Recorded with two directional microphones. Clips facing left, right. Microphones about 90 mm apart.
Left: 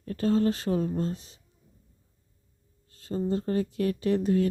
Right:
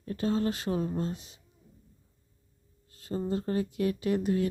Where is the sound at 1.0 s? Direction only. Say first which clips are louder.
Left 3 dB; 35° left (ahead or behind).